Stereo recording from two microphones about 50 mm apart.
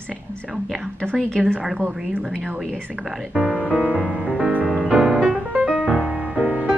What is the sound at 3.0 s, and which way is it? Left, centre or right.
Speech, centre.